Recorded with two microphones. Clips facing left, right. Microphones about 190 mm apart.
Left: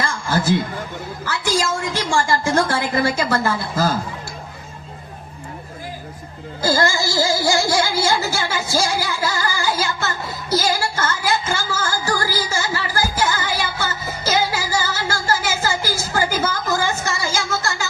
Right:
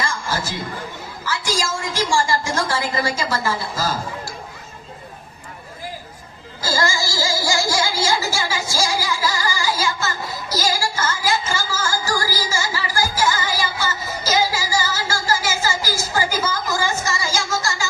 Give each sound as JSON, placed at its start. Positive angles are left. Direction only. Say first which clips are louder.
{"t": 0.0, "sound": "a sound", "louder": "left 4 dB", "side_deg": 55}
{"t": 1.2, "sound": "a woman's voice", "louder": "left 3 dB", "side_deg": 55}
{"t": 6.6, "sound": "music", "louder": "left 4 dB", "side_deg": 55}